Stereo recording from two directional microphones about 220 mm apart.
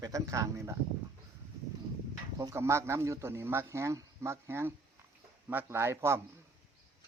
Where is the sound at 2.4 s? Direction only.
15° right (ahead or behind).